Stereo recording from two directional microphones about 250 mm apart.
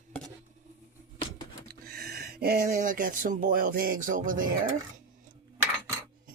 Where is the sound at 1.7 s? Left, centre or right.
Right.